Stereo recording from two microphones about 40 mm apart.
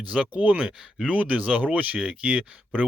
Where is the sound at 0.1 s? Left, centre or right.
Right.